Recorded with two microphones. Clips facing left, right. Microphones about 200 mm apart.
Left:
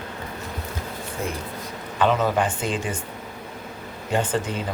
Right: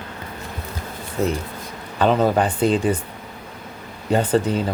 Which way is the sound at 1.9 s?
35° right (ahead or behind).